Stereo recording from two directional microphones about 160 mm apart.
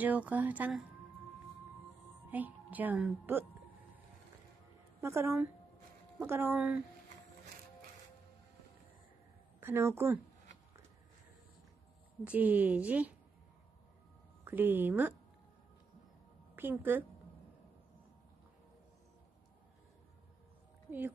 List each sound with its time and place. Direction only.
0.0 s speech: 10° right (ahead or behind)
2.3 s a woman's voice: 10° right (ahead or behind)
5.0 s speech: 15° right (ahead or behind)
9.6 s speech: 15° right (ahead or behind)
12.3 s speech: 10° right (ahead or behind)
14.4 s speech: 10° right (ahead or behind)
16.5 s speech: 15° right (ahead or behind)